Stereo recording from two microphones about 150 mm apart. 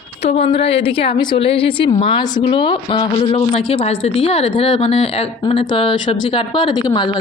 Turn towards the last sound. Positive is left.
turn(degrees=30)  # may be behind; listen again after turning